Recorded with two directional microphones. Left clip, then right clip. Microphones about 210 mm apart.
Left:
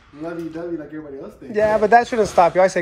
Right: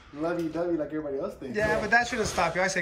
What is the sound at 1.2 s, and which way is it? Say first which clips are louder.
A man's voice: left 11 dB; centre (ahead or behind).